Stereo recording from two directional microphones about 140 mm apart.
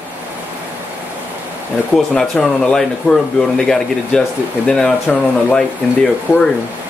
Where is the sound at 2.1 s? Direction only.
5° left (ahead or behind).